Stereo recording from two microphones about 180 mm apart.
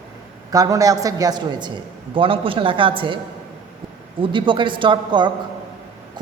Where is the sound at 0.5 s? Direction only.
20° right (ahead or behind).